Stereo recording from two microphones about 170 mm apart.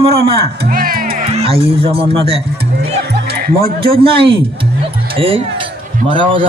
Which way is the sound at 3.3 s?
65° right (ahead or behind).